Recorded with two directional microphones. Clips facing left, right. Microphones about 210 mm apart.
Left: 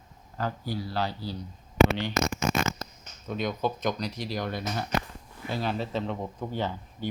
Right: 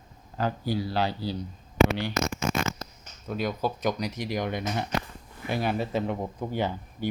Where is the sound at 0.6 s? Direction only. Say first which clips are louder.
Right 4 dB; 90° right.